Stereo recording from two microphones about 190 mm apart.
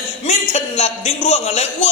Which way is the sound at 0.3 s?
40° left (ahead or behind).